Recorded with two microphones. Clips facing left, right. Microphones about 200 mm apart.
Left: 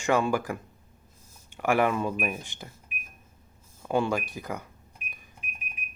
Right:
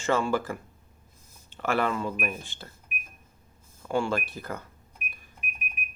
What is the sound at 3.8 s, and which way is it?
Speech, 20° left (ahead or behind).